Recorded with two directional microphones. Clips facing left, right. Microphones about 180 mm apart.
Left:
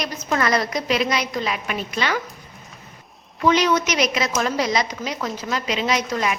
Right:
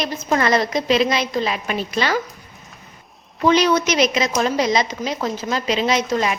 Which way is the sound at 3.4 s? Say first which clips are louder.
Right 2 dB; 35° right (ahead or behind).